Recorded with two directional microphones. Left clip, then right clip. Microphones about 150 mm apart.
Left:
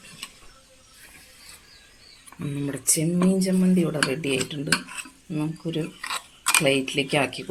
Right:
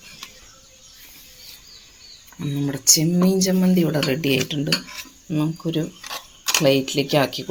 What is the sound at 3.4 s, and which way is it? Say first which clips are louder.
Speech: right 4 dB; 55° right (ahead or behind).